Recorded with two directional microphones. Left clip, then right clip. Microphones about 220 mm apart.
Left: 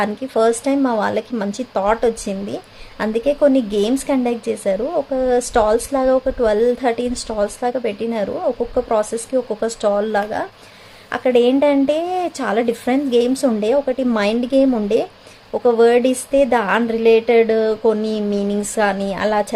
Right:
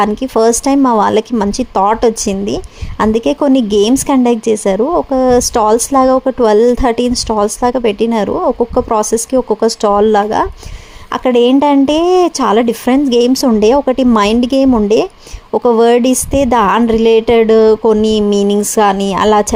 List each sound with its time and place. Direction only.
0.0 s speech: 30° right (ahead or behind)